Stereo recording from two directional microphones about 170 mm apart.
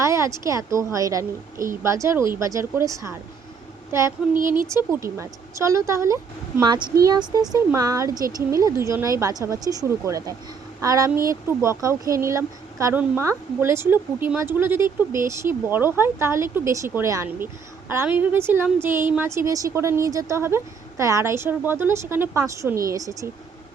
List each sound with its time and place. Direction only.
0.0 s a woman's voice: 15° right (ahead or behind)
4.6 s speech: 15° right (ahead or behind)